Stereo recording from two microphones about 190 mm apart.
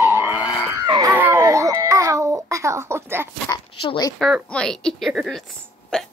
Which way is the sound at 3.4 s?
20° left (ahead or behind).